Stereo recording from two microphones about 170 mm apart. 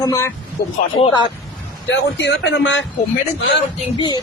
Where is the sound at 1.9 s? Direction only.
90° left.